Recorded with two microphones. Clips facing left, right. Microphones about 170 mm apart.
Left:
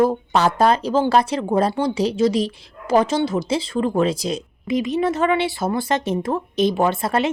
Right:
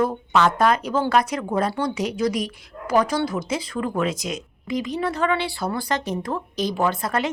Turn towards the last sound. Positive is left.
turn(degrees=25)  # may be behind; listen again after turning